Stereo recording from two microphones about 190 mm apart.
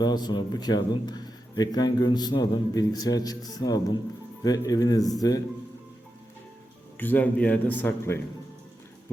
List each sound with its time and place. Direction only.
0.0 s a man's voice: 20° left (ahead or behind)
6.9 s a man's voice: 10° left (ahead or behind)